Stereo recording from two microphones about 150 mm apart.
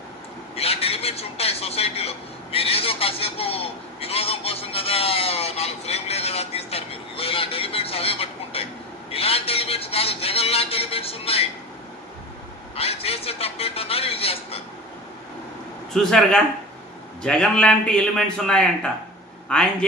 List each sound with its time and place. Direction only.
0.5 s a man's voice: 40° left (ahead or behind)
12.7 s a man's voice: 40° left (ahead or behind)
15.9 s a man's voice: centre (ahead or behind)